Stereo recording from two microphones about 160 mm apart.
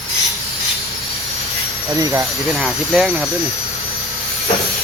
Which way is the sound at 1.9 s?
20° right (ahead or behind).